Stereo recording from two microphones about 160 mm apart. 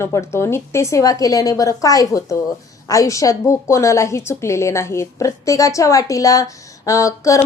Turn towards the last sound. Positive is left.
turn(degrees=20)  # may be behind; listen again after turning